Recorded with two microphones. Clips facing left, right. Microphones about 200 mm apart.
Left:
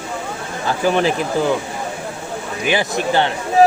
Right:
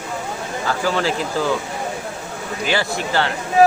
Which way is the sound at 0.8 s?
20° left (ahead or behind).